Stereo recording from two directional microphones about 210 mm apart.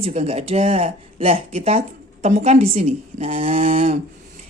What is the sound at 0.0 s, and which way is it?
A woman's voice, 30° right (ahead or behind).